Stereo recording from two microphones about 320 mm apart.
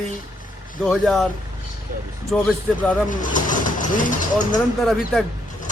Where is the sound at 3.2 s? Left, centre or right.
Left.